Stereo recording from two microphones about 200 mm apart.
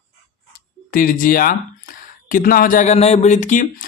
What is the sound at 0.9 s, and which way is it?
Speech, 45° left (ahead or behind).